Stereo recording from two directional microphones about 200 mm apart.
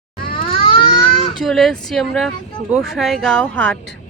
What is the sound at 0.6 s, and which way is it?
Baby cry, 25° left (ahead or behind).